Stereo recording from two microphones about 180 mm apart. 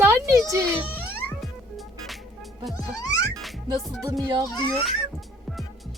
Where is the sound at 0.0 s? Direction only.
15° right (ahead or behind).